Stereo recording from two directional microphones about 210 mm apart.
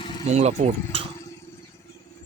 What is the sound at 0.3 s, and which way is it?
Speech, 30° right (ahead or behind).